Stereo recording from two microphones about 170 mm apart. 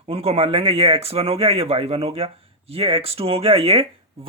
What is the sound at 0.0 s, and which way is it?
Speech, 35° right (ahead or behind).